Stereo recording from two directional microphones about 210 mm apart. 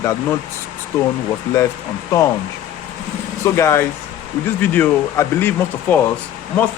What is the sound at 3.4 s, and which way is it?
Speech, 15° left (ahead or behind).